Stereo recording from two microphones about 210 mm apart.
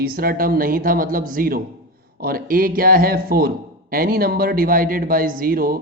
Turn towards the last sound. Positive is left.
turn(degrees=-45)  # may be behind; listen again after turning